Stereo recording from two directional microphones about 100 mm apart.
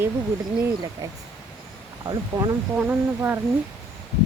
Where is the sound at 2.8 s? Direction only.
15° right (ahead or behind).